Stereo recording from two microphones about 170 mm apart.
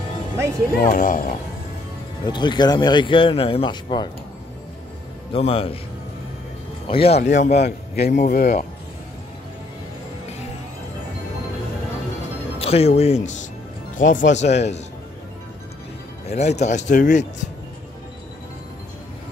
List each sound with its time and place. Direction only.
0.8 s speech: 50° left (ahead or behind)
2.2 s speech: 25° left (ahead or behind)
5.3 s speech: 35° left (ahead or behind)
6.9 s speech: 35° left (ahead or behind)
7.5 s a man's voice: 70° left (ahead or behind)
8.1 s speech: 50° left (ahead or behind)
12.5 s speech: 35° left (ahead or behind)
16.3 s speech: 40° left (ahead or behind)